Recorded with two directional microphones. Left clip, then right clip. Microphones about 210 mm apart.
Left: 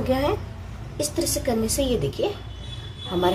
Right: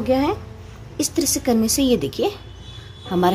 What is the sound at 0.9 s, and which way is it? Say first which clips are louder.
A woman's voice: right 4 dB; 55° right (ahead or behind).